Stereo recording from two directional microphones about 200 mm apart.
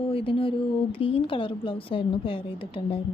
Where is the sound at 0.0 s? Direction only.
25° left (ahead or behind).